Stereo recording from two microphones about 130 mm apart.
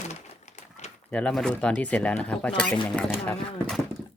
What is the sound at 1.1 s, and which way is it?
Speech, 5° left (ahead or behind).